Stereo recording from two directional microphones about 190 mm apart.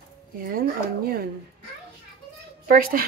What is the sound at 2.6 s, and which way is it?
Speech, 45° right (ahead or behind).